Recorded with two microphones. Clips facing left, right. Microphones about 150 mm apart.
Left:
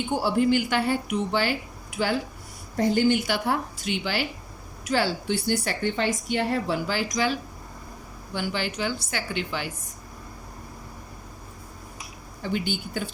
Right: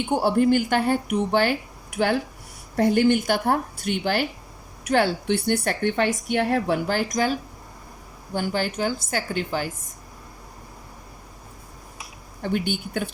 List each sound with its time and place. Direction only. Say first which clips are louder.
0.1 s a woman's voice: right 3 dB; 55° right (ahead or behind)
12.4 s a woman's voice: right 3 dB; 55° right (ahead or behind)